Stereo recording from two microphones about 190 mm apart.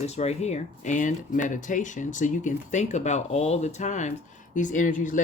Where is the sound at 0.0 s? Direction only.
35° left (ahead or behind).